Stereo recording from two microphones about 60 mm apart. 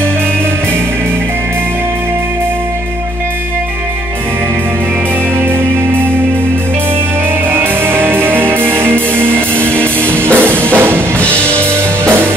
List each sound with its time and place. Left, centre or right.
7.5 s music: right